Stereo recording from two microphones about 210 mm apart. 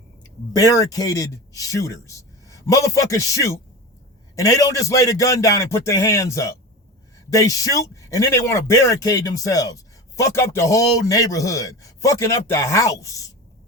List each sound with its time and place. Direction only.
0.2 s speech: 15° left (ahead or behind)